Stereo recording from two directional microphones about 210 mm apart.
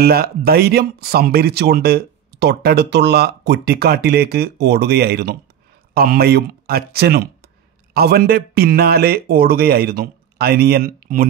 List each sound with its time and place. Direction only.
0.0 s speech: 45° right (ahead or behind)